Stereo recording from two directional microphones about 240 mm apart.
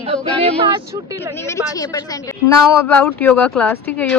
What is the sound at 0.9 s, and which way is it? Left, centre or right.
Speech, centre.